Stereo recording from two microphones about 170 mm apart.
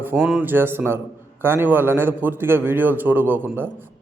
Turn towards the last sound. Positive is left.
turn(degrees=-10)  # may be behind; listen again after turning